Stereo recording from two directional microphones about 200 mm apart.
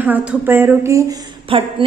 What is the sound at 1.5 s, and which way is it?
Speech, 25° right (ahead or behind).